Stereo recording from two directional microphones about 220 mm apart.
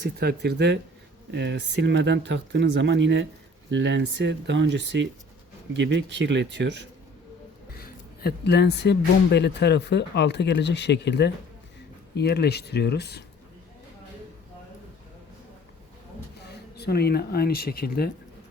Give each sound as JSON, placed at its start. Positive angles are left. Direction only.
{"t": 0.0, "sound": "speech", "side_deg": -50}
{"t": 7.7, "sound": "speech", "side_deg": 45}
{"t": 16.7, "sound": "speech", "side_deg": 45}